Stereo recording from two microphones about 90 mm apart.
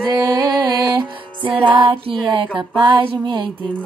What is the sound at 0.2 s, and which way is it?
Music, 40° right (ahead or behind).